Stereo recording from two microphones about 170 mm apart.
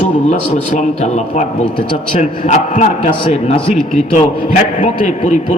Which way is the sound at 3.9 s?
45° left (ahead or behind).